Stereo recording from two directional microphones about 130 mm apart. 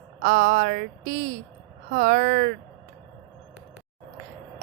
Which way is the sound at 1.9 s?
75° right (ahead or behind).